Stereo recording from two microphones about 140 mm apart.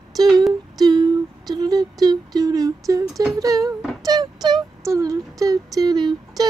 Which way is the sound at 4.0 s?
30° right (ahead or behind).